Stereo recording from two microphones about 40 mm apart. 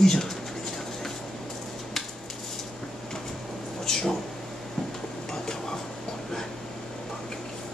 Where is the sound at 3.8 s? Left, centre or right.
Centre.